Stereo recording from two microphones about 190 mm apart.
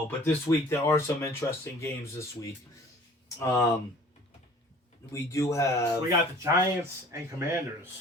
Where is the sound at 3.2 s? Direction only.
15° left (ahead or behind).